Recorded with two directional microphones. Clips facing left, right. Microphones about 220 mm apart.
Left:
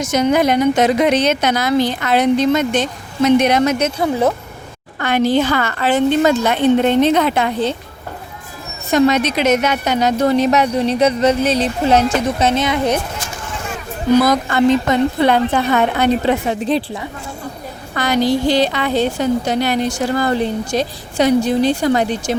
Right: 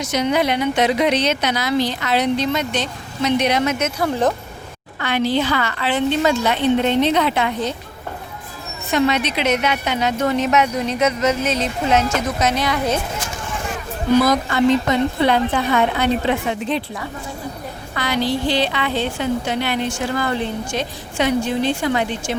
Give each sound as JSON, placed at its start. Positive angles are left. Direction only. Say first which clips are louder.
{"t": 0.0, "sound": "a woman's voice", "louder": "left 4 dB", "side_deg": 45}
{"t": 4.0, "sound": "speech", "louder": "left 2 dB", "side_deg": 10}
{"t": 4.9, "sound": "a woman's voice", "louder": "left 4 dB", "side_deg": 45}
{"t": 8.9, "sound": "a woman's voice", "louder": "left 5 dB", "side_deg": 40}
{"t": 15.3, "sound": "a woman's voice", "louder": "left 3 dB", "side_deg": 45}